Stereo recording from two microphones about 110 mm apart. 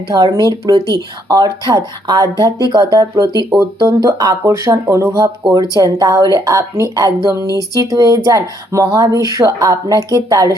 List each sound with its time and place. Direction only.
0.1 s a woman's voice: 35° right (ahead or behind)